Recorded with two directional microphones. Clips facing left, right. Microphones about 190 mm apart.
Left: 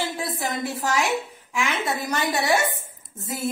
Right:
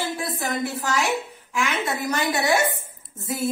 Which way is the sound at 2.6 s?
Centre (ahead or behind).